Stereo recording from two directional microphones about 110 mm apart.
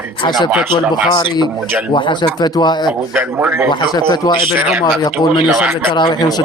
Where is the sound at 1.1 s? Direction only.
45° left (ahead or behind).